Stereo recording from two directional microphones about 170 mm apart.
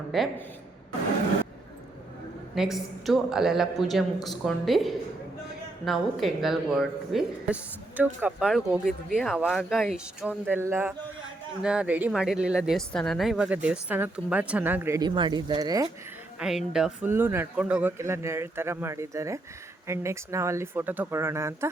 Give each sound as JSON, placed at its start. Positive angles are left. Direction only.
{"t": 0.1, "sound": "speech", "side_deg": 0}
{"t": 2.6, "sound": "speech", "side_deg": 0}
{"t": 16.4, "sound": "speech", "side_deg": -5}